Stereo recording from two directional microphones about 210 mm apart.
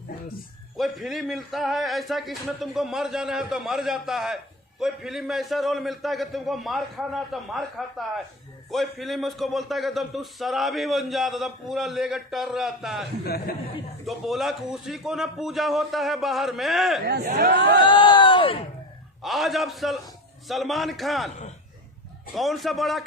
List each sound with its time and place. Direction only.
0.8 s a man's voice: centre (ahead or behind)
13.2 s speech: 45° left (ahead or behind)
14.1 s a man's voice: centre (ahead or behind)
17.1 s speech: 50° right (ahead or behind)
17.7 s speech: 25° left (ahead or behind)
19.2 s a man's voice: centre (ahead or behind)
22.4 s a man's voice: centre (ahead or behind)